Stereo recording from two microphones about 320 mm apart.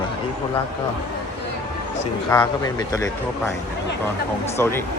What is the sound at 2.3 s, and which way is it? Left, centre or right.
Speech, centre.